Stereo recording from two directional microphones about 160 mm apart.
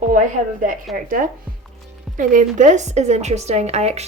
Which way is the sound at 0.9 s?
60° right (ahead or behind).